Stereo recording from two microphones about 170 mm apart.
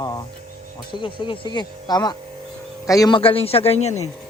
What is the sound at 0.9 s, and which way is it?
A man's voice, 30° left (ahead or behind).